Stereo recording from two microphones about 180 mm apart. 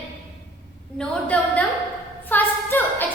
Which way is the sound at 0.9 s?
5° left (ahead or behind).